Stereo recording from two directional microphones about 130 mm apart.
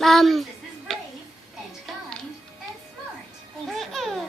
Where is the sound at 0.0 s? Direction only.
Centre (ahead or behind).